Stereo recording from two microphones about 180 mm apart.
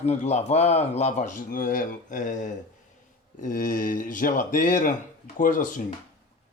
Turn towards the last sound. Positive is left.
turn(degrees=50)  # may be behind; listen again after turning